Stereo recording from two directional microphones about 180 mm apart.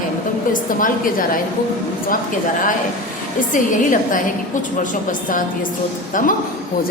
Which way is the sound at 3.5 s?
45° left (ahead or behind).